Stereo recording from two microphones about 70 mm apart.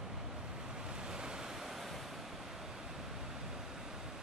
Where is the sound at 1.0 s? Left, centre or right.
Centre.